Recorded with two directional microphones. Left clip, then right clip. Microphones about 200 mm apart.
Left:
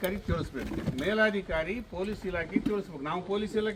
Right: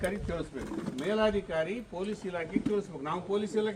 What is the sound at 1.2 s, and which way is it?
Speech, 25° left (ahead or behind).